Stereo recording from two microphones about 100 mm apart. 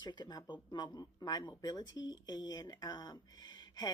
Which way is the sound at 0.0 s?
45° left (ahead or behind).